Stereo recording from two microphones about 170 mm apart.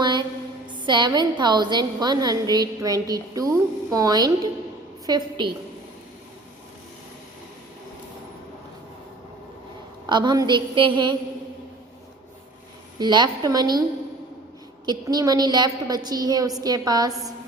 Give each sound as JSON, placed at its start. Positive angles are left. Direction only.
{"t": 0.0, "sound": "a sound", "side_deg": -25}
{"t": 0.7, "sound": "a woman's voice", "side_deg": -25}
{"t": 10.1, "sound": "a woman's voice", "side_deg": -25}
{"t": 13.0, "sound": "a woman's voice", "side_deg": -25}
{"t": 14.8, "sound": "a woman's voice", "side_deg": -25}